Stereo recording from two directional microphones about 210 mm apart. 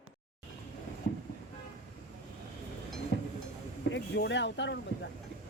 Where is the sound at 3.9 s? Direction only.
55° left (ahead or behind).